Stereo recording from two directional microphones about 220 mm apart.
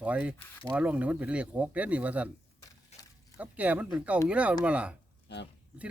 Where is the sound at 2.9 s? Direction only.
30° left (ahead or behind).